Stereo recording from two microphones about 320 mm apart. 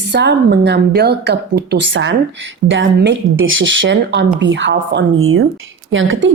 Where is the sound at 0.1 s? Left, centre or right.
Right.